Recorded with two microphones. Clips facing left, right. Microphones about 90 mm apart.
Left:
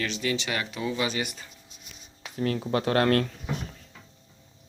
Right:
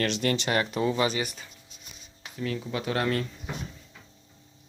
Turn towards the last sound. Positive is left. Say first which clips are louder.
# left 5 dB
turn(degrees=60)  # may be behind; listen again after turning